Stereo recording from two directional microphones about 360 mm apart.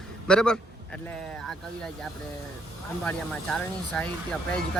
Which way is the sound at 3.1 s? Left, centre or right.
Centre.